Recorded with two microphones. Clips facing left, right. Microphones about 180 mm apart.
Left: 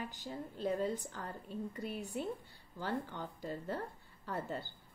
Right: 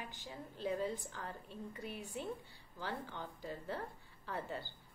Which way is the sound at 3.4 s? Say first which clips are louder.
Left 3 dB; 45° left (ahead or behind).